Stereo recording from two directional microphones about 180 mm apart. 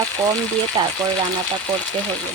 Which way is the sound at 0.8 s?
25° right (ahead or behind).